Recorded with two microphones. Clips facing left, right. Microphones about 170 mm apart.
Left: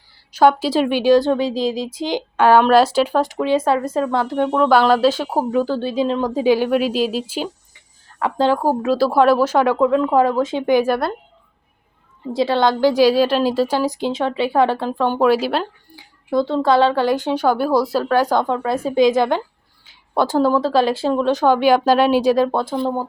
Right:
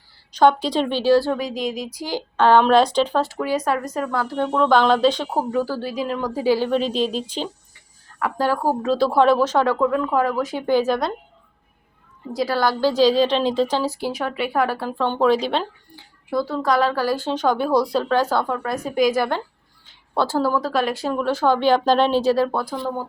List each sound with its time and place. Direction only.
0.3 s speech: 5° left (ahead or behind)
3.3 s speech: 25° left (ahead or behind); by 7.4 s 5° left (ahead or behind)
8.2 s speech: 20° left (ahead or behind)
8.8 s speech: 5° left (ahead or behind); by 10.8 s 25° left (ahead or behind)
10.8 s speech: 10° left (ahead or behind)
12.3 s speech: 25° left (ahead or behind); by 16.0 s 5° left (ahead or behind)
16.3 s speech: 25° left (ahead or behind)